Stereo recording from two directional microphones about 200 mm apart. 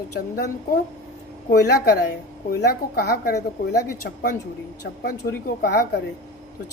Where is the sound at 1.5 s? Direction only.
55° left (ahead or behind).